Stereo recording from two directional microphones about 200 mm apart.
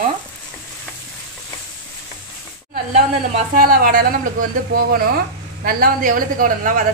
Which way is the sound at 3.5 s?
45° right (ahead or behind).